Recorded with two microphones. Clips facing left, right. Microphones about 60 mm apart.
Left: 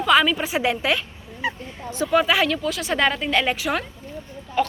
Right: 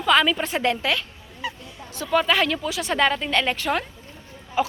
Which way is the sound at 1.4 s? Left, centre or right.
Left.